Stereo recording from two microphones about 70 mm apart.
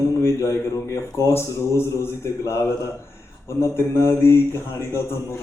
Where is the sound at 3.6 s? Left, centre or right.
Left.